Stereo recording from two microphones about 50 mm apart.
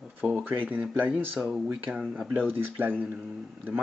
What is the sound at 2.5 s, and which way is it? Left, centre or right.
Speech, right.